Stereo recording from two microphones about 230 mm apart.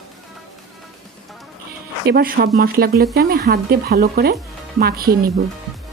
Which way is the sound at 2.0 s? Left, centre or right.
Right.